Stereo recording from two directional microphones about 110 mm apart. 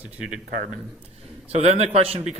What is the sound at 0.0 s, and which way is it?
Speech, 10° right (ahead or behind).